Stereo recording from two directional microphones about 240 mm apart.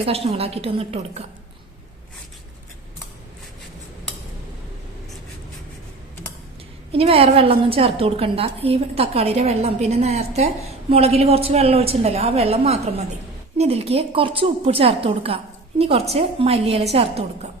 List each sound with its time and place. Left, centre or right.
0.0 s a woman's voice: right
6.9 s a woman's voice: right